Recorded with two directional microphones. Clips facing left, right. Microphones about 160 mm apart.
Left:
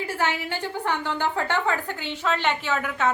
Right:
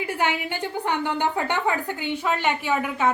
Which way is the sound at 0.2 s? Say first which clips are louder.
Right 1 dB; 15° right (ahead or behind).